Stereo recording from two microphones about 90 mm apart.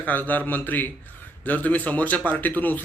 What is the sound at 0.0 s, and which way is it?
A man's voice, 20° left (ahead or behind).